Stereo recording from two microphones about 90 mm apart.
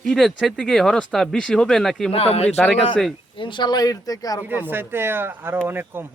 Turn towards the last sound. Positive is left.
turn(degrees=-25)  # may be behind; listen again after turning